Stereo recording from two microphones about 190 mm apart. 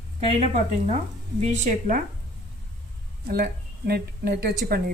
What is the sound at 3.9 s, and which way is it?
Speech, 55° right (ahead or behind).